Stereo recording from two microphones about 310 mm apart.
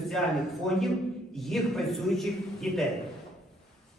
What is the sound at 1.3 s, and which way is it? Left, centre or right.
A man's voice, centre.